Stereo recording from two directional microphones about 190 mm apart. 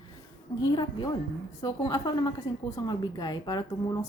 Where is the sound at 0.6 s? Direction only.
20° left (ahead or behind).